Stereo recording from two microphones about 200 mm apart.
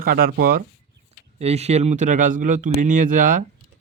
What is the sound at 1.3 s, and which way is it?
Speech, 30° right (ahead or behind).